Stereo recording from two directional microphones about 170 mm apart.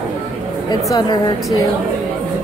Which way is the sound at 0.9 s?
25° left (ahead or behind).